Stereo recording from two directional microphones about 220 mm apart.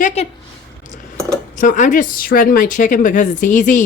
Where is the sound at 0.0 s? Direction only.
30° left (ahead or behind).